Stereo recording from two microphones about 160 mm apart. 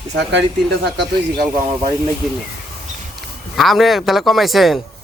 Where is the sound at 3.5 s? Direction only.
Centre (ahead or behind).